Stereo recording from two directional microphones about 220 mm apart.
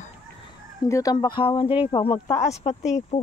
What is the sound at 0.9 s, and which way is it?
A woman's voice, 15° left (ahead or behind).